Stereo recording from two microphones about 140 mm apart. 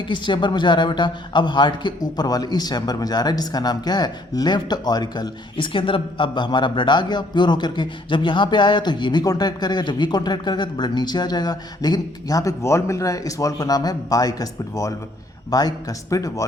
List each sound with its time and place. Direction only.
0.1 s a man's voice: 35° left (ahead or behind)